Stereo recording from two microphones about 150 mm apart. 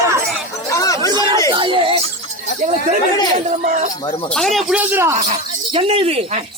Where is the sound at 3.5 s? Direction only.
55° right (ahead or behind).